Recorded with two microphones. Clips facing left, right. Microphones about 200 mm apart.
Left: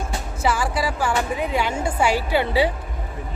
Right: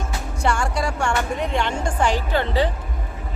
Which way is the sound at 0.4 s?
5° left (ahead or behind).